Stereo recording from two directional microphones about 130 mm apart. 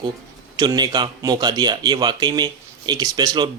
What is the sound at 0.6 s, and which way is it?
Speech, 30° right (ahead or behind).